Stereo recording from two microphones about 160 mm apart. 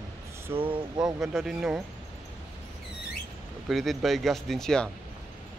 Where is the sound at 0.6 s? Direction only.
35° right (ahead or behind).